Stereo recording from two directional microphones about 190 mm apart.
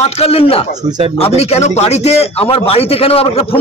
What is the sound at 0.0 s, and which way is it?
A man's voice, 30° left (ahead or behind).